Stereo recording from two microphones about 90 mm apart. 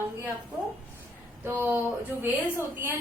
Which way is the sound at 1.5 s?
20° right (ahead or behind).